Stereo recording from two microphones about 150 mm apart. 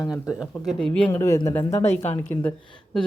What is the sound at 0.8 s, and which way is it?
Speech, 5° left (ahead or behind).